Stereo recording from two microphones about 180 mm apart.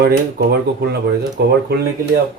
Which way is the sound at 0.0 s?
65° right (ahead or behind).